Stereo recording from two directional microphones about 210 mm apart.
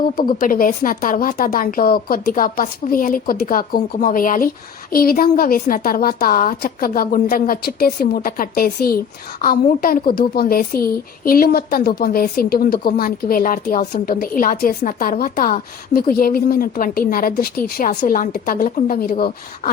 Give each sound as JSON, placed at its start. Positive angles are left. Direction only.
{"t": 0.2, "sound": "a woman's voice", "side_deg": 40}